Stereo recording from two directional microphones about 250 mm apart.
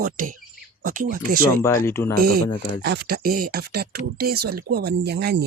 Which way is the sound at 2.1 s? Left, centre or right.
Right.